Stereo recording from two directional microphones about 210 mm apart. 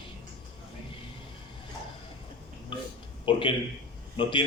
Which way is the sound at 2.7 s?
25° left (ahead or behind).